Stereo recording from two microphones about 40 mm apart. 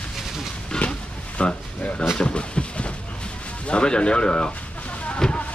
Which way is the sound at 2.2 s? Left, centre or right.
Left.